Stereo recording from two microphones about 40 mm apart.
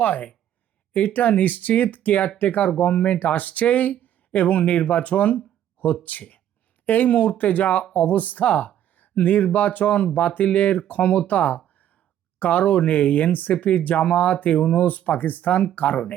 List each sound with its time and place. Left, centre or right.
0.0 s speech: left
3.2 s speech: left